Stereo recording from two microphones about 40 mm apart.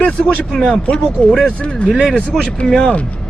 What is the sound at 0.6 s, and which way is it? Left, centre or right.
Speech, left.